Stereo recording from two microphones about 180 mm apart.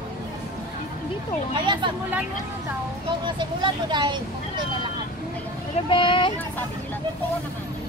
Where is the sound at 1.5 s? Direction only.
25° right (ahead or behind).